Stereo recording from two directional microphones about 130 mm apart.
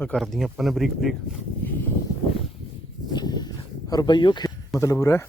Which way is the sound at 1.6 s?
15° left (ahead or behind).